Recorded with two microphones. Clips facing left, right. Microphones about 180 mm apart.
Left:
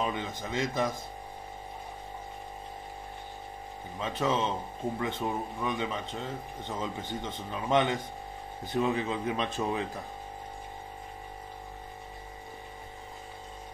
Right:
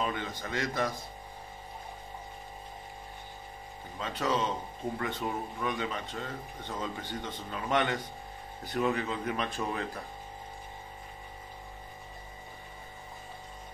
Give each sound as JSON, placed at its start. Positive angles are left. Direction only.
{"t": 0.0, "sound": "a sound", "side_deg": 20}
{"t": 0.4, "sound": "speech", "side_deg": 20}
{"t": 4.0, "sound": "speech", "side_deg": 25}